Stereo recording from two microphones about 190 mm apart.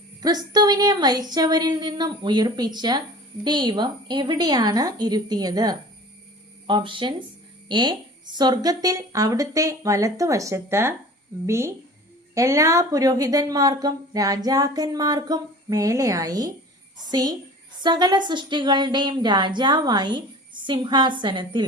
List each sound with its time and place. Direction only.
0.2 s a woman's voice: 20° right (ahead or behind)